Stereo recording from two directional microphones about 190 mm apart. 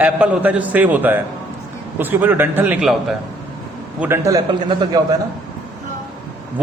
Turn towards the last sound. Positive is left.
turn(degrees=-20)  # may be behind; listen again after turning